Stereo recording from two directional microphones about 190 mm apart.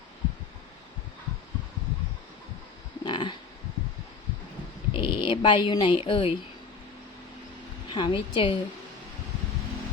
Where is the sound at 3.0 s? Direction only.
25° left (ahead or behind).